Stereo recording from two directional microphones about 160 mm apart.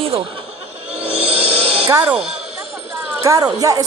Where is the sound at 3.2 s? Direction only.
20° right (ahead or behind).